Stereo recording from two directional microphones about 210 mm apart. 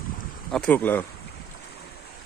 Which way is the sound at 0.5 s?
5° left (ahead or behind).